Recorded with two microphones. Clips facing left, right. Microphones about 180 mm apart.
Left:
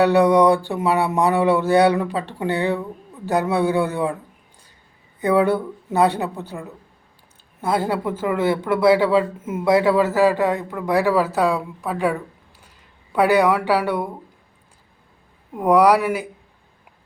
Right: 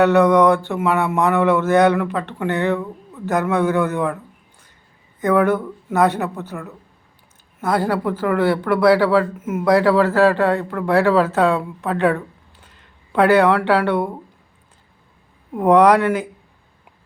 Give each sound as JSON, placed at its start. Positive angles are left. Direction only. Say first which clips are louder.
{"t": 0.0, "sound": "a man's voice", "louder": "right 1 dB", "side_deg": 15}
{"t": 5.5, "sound": "speech", "louder": "right 1 dB", "side_deg": 35}
{"t": 7.8, "sound": "a man's voice", "louder": "right 2 dB", "side_deg": 20}
{"t": 15.5, "sound": "a man's voice", "louder": "right 2 dB", "side_deg": 10}